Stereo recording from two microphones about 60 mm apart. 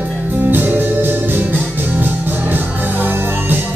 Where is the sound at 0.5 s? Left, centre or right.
Right.